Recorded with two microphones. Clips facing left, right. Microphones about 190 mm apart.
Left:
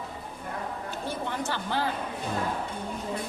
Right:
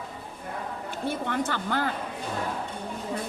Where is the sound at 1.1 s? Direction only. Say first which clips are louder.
Right 4 dB; 55° right (ahead or behind).